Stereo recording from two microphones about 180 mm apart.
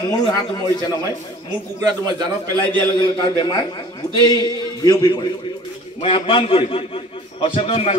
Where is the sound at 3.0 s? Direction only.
25° left (ahead or behind).